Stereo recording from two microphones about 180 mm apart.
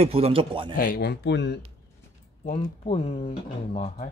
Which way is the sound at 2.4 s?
30° left (ahead or behind).